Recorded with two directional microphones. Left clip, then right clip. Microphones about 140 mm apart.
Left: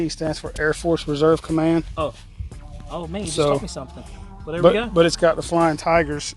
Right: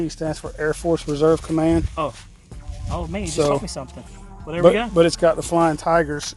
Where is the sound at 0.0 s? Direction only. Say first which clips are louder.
Left 1 dB; 25° left (ahead or behind).